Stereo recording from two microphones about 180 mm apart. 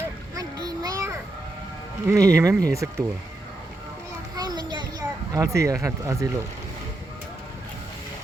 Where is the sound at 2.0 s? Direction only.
15° right (ahead or behind).